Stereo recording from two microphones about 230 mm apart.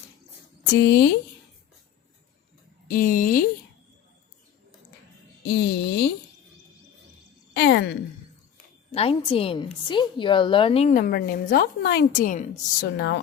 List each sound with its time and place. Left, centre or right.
0.7 s speech: left
2.8 s speech: left
5.5 s speech: left
7.5 s speech: left
8.9 s a woman's voice: left